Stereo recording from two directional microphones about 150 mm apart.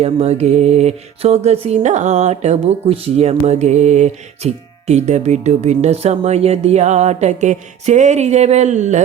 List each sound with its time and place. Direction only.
0.0 s mantra: 45° right (ahead or behind)